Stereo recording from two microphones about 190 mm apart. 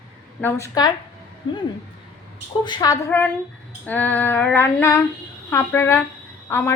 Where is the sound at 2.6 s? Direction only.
20° left (ahead or behind).